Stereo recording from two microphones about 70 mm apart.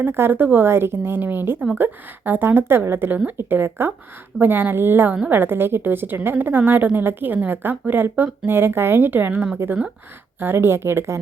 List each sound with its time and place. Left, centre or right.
0.0 s a woman's voice: right